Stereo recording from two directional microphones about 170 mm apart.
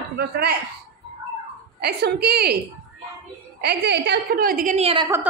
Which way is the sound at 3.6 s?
85° right.